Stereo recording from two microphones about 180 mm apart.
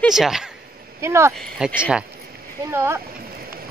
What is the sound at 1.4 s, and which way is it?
Speech, centre (ahead or behind).